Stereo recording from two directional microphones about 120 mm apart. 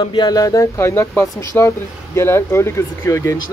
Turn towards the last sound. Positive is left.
turn(degrees=25)  # may be behind; listen again after turning